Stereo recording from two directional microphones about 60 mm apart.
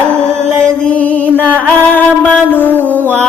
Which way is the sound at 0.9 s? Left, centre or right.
Left.